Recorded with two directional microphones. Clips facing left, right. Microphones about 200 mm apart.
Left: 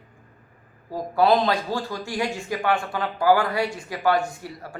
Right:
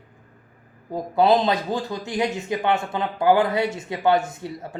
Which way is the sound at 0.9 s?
20° right (ahead or behind).